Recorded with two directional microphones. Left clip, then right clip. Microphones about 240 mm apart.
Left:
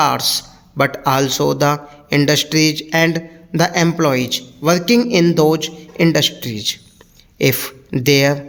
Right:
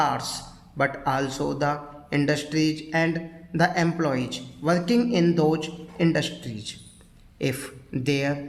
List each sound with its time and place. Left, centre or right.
0.0 s a man's voice: left